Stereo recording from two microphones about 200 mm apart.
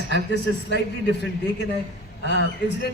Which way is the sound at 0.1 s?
60° left (ahead or behind).